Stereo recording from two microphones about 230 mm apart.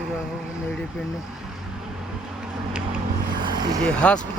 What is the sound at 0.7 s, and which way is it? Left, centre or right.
Speech, centre.